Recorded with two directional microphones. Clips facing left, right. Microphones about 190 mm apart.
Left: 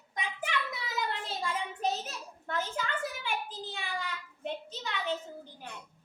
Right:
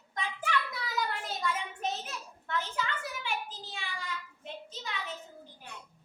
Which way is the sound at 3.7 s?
55° left (ahead or behind).